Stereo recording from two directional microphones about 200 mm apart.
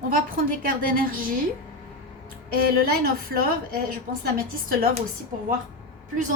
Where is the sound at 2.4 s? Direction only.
50° right (ahead or behind).